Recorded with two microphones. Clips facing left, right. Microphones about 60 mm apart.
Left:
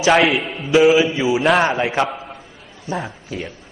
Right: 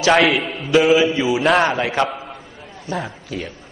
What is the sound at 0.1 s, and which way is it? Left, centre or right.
A man's voice, centre.